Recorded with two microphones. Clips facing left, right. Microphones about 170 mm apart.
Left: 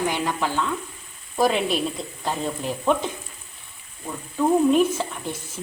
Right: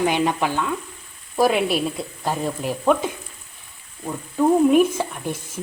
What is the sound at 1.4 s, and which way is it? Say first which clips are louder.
A woman's voice: right 2 dB; 5° right (ahead or behind).